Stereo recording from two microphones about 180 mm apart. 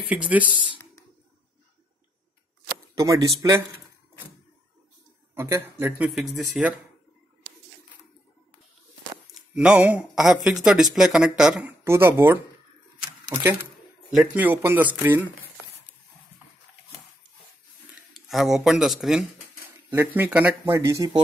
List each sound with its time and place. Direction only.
0.1 s speech: 10° right (ahead or behind)
3.0 s speech: 20° right (ahead or behind)
5.3 s speech: 15° right (ahead or behind)
9.3 s speech: 5° right (ahead or behind)
11.8 s speech: 15° right (ahead or behind)
18.3 s speech: centre (ahead or behind)